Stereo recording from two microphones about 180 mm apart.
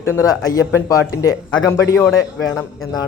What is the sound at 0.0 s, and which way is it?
Speech, 15° left (ahead or behind).